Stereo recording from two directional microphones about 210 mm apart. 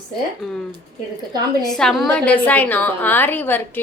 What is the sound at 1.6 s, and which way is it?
A woman's voice, centre (ahead or behind).